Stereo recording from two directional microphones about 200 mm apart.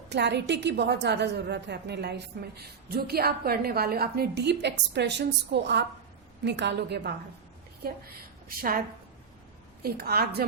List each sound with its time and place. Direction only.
0.1 s a woman's voice: 60° right (ahead or behind)
8.4 s a woman's voice: 45° right (ahead or behind)
9.8 s a woman's voice: 50° right (ahead or behind)